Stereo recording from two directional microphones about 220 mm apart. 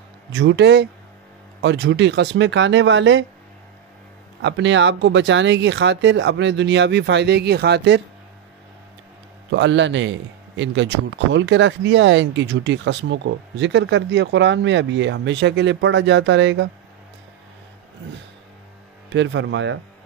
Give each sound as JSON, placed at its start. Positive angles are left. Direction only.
{"t": 0.3, "sound": "speech", "side_deg": -55}
{"t": 4.4, "sound": "speech", "side_deg": -55}
{"t": 9.5, "sound": "speech", "side_deg": -55}
{"t": 19.0, "sound": "speech", "side_deg": -55}